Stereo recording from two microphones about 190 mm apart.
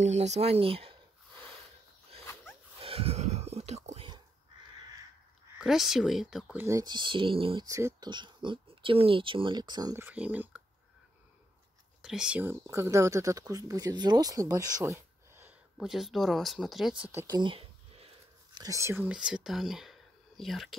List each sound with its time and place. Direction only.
0.0 s speech: 35° right (ahead or behind)
2.8 s whispering: 30° right (ahead or behind)
5.6 s speech: centre (ahead or behind); by 7.6 s 25° right (ahead or behind)
7.6 s speech: 15° right (ahead or behind)
12.0 s speech: 5° right (ahead or behind)
17.0 s speech: 15° right (ahead or behind)
17.4 s a sound: 30° right (ahead or behind)
18.6 s speech: 15° right (ahead or behind); by 20.7 s centre (ahead or behind)